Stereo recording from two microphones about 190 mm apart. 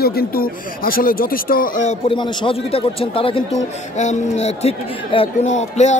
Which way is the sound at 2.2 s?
25° left (ahead or behind).